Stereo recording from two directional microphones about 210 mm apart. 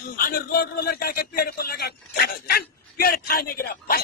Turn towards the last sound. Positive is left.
turn(degrees=45)  # may be behind; listen again after turning